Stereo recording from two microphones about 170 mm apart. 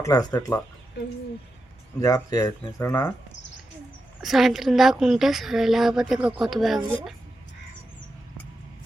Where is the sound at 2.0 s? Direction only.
20° left (ahead or behind).